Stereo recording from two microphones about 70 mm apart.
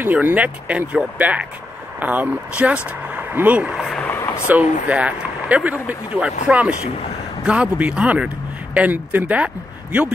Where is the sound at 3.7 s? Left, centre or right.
Centre.